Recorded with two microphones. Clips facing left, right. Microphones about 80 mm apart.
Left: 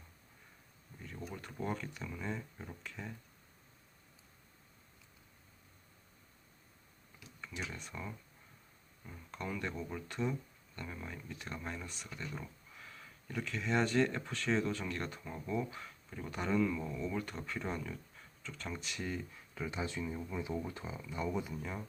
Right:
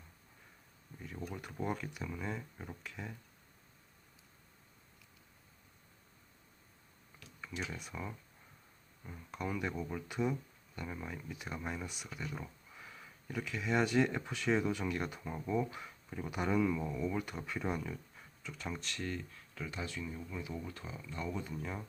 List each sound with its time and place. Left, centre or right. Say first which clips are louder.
1.3 s speech: right 1 dB; centre
7.4 s speech: right 2 dB; centre
18.8 s speech: even; centre
21.5 s speech: even; centre